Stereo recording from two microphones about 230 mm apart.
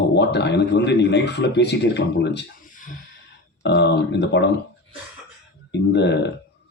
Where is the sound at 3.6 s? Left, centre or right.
Left.